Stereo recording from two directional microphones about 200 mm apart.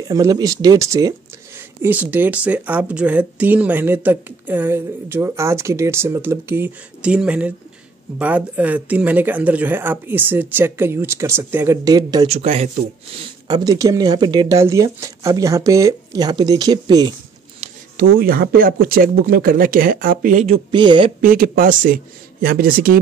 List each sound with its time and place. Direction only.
0.1 s speech: 20° right (ahead or behind)
12.3 s speech: 30° right (ahead or behind)
13.5 s speech: 20° right (ahead or behind)
17.9 s speech: 45° right (ahead or behind); by 21.1 s 25° right (ahead or behind)
21.2 s speech: 45° right (ahead or behind)